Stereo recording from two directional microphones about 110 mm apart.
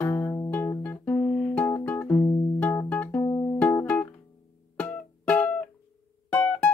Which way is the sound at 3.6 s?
15° left (ahead or behind).